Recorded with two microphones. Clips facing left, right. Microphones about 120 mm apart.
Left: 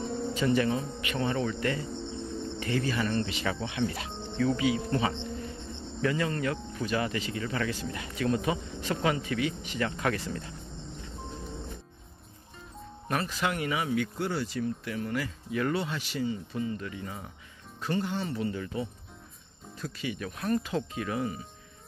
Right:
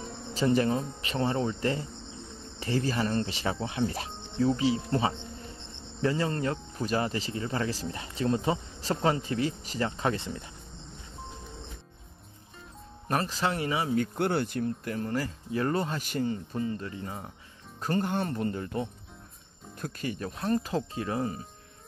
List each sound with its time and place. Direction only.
0.3 s speech: 35° right (ahead or behind)
9.8 s speech: 25° right (ahead or behind)
13.1 s speech: 35° right (ahead or behind)
14.1 s speech: 60° right (ahead or behind)
16.7 s speech: 35° right (ahead or behind)
17.7 s speech: 45° right (ahead or behind)
20.2 s speech: 30° right (ahead or behind)